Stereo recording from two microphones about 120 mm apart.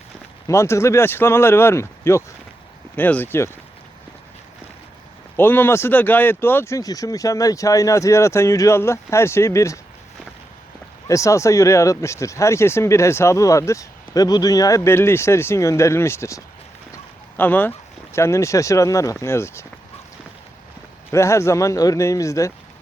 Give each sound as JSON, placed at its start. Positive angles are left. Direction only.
{"t": 0.4, "sound": "speech", "side_deg": 25}
{"t": 5.4, "sound": "speech", "side_deg": 20}
{"t": 11.1, "sound": "speech", "side_deg": 25}
{"t": 21.1, "sound": "speech", "side_deg": 25}